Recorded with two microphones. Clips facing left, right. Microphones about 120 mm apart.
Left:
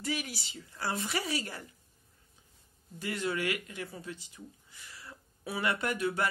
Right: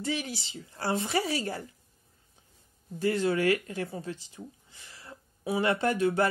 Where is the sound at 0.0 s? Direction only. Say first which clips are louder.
Right 3 dB; 25° right (ahead or behind).